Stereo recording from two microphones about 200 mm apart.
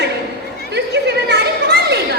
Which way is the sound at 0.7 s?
55° right (ahead or behind).